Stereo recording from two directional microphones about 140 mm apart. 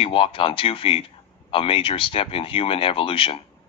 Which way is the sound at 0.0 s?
40° left (ahead or behind).